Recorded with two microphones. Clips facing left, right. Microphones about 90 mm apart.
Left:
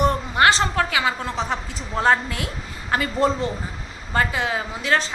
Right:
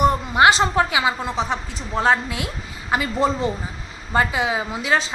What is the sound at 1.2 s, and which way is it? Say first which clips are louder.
A woman's voice: right 2 dB; centre (ahead or behind).